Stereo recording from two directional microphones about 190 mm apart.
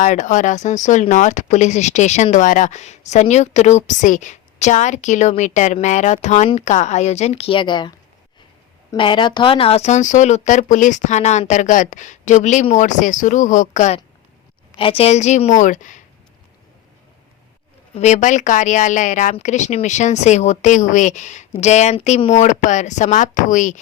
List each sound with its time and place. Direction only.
0.0 s speech: 40° left (ahead or behind)
14.8 s speech: 30° left (ahead or behind)
17.9 s speech: 35° left (ahead or behind)